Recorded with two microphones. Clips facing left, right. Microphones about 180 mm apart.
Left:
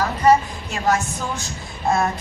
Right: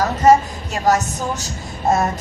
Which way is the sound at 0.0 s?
45° right (ahead or behind).